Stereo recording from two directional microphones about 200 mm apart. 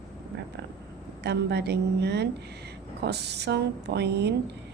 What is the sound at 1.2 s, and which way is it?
Speech, 55° right (ahead or behind).